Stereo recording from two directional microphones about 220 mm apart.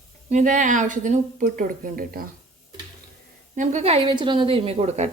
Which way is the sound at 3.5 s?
35° right (ahead or behind).